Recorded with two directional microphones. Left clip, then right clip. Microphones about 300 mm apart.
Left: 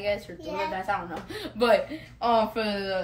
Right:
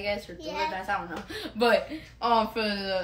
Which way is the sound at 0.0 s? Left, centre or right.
Centre.